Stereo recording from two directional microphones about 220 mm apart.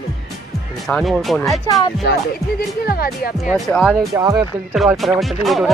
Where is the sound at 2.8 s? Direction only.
45° left (ahead or behind).